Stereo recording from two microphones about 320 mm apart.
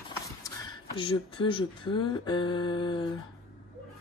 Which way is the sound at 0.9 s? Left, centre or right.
Centre.